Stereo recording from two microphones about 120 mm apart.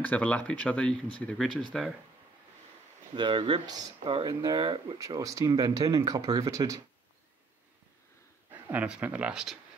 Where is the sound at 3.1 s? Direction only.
40° right (ahead or behind).